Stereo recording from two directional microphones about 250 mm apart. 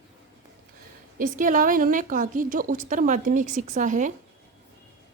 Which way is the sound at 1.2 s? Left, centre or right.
Right.